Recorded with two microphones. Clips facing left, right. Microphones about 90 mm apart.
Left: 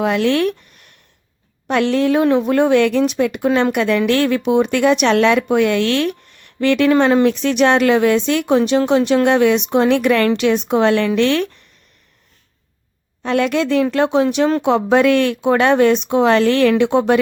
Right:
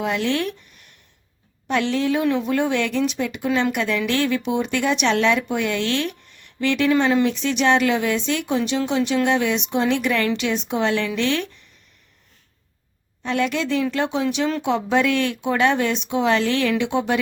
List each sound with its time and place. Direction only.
0.0 s speech: 60° left (ahead or behind)
2.2 s speech: 45° left (ahead or behind)
13.2 s speech: 60° left (ahead or behind)